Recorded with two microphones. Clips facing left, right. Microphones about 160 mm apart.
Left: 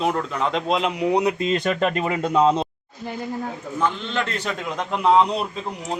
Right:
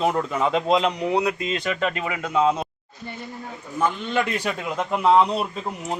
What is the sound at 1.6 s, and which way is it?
Speech, 45° left (ahead or behind).